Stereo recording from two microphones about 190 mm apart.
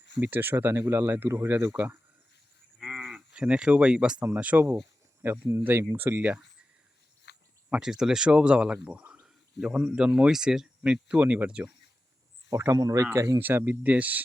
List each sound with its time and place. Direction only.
0.2 s speech: 10° right (ahead or behind)
7.3 s cricket: 65° left (ahead or behind)
7.7 s speech: 5° right (ahead or behind)
12.5 s speech: 15° right (ahead or behind)